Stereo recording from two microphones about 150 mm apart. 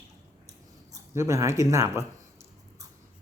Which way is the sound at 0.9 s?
20° right (ahead or behind).